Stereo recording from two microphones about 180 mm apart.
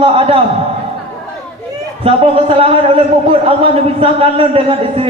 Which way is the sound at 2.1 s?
30° right (ahead or behind).